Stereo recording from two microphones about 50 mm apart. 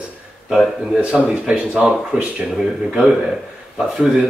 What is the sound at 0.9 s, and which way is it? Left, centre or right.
A man's voice, right.